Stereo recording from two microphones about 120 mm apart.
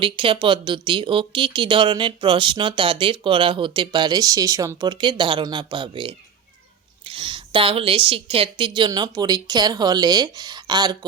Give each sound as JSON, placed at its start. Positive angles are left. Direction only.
{"t": 0.0, "sound": "a woman's voice", "side_deg": -45}